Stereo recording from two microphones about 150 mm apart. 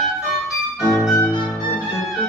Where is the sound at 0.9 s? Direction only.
5° left (ahead or behind).